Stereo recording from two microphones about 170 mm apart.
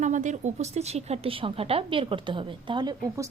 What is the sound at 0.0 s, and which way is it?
A woman's voice, 45° right (ahead or behind).